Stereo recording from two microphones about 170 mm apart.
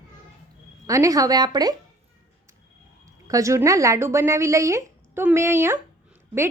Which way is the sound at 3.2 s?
20° right (ahead or behind).